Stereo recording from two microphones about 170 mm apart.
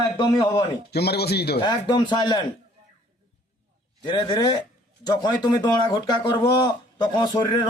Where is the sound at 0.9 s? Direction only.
70° left (ahead or behind).